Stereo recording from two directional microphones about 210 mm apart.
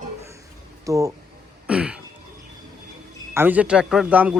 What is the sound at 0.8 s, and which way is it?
Speech, 15° right (ahead or behind).